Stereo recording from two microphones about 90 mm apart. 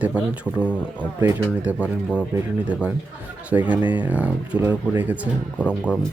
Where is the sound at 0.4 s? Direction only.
20° left (ahead or behind).